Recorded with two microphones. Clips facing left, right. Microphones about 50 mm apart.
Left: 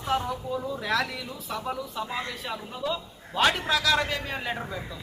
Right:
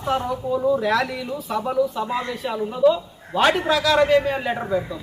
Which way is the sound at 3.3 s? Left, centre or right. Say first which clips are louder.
Right 6 dB; centre.